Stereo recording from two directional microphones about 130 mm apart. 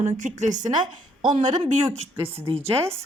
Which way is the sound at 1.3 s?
70° right (ahead or behind).